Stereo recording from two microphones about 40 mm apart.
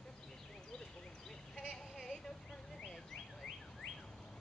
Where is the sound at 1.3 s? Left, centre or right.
Centre.